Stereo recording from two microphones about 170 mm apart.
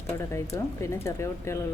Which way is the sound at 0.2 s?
15° left (ahead or behind).